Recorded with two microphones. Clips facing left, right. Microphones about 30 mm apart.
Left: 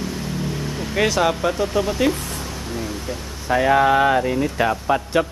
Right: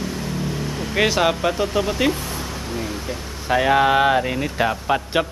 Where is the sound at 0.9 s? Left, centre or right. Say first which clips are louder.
Even; centre.